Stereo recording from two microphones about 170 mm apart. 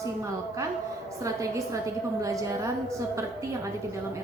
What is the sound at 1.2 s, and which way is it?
A woman's voice, 20° right (ahead or behind).